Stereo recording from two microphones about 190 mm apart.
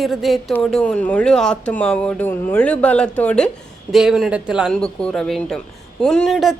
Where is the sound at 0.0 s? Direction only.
Centre (ahead or behind).